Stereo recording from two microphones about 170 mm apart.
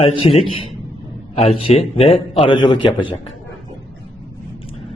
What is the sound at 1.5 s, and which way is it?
A man's voice, 35° left (ahead or behind).